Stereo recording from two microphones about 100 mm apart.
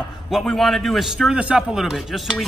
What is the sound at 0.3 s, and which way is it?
Speech, centre (ahead or behind).